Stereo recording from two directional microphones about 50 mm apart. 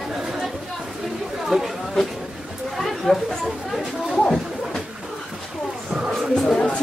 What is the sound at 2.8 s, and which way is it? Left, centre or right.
Speech, centre.